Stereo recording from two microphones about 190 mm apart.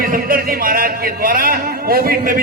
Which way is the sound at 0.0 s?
50° right (ahead or behind).